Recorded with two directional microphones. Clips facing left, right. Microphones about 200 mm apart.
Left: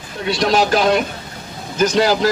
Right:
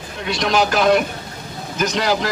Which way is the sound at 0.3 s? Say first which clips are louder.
Left 3 dB; 35° left (ahead or behind).